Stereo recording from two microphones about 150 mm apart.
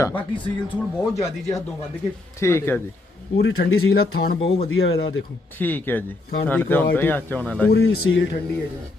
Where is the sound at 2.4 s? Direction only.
15° left (ahead or behind).